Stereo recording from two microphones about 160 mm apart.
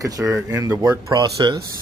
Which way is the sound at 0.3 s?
15° right (ahead or behind).